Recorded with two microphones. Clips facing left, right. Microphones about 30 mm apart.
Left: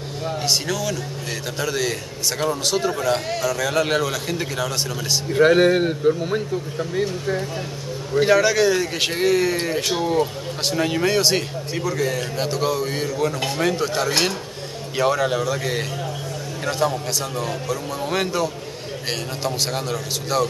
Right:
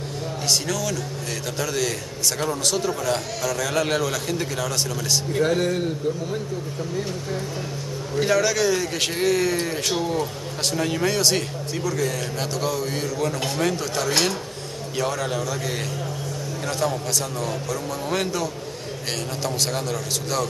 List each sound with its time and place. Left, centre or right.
0.5 s a man's voice: centre
5.4 s speech: left
8.1 s a man's voice: centre